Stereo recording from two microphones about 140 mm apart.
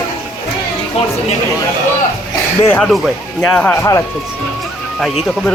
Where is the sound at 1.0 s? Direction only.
45° left (ahead or behind).